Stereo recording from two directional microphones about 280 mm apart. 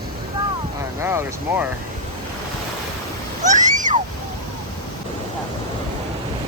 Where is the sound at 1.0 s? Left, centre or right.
Centre.